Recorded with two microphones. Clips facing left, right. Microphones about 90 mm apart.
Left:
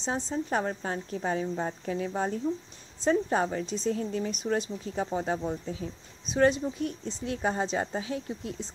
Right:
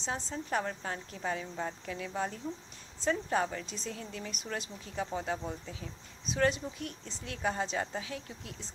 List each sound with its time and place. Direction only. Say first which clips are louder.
0.0 s speech: left 6 dB; 30° left (ahead or behind)